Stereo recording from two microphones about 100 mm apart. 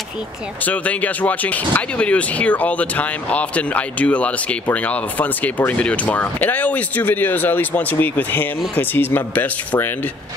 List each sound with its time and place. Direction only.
0.7 s speech: 15° left (ahead or behind)